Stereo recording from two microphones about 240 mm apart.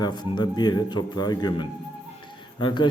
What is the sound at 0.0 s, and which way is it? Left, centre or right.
A man's voice, centre.